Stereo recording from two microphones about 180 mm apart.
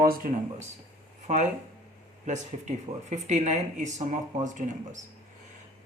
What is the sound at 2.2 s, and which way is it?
Speech, 40° right (ahead or behind).